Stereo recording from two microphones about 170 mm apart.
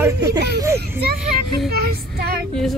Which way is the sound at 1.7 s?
65° right (ahead or behind).